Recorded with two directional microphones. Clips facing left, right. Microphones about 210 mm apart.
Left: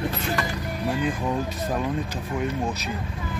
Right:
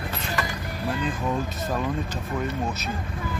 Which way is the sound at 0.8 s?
15° left (ahead or behind).